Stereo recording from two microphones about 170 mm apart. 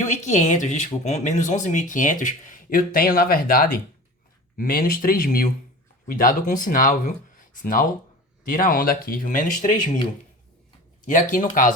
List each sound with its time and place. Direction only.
0.0 s speech: 45° left (ahead or behind)
11.0 s speech: 50° left (ahead or behind)